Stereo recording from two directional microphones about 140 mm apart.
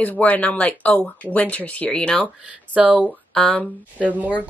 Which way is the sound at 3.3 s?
5° left (ahead or behind).